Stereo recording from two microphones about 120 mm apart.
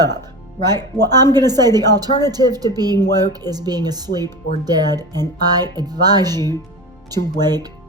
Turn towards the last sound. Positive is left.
turn(degrees=-35)  # may be behind; listen again after turning